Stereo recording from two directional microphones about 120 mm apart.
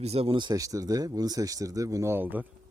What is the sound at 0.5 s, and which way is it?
Speech, 30° right (ahead or behind).